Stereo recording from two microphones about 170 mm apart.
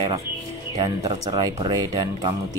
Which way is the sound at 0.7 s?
25° right (ahead or behind).